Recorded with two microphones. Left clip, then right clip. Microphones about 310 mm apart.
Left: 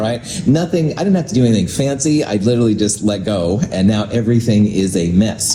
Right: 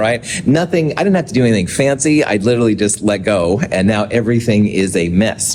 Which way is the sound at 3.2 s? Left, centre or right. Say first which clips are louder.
Right 5 dB; right.